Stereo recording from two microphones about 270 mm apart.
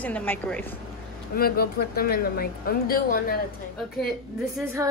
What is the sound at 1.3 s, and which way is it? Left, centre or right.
A woman's voice, left.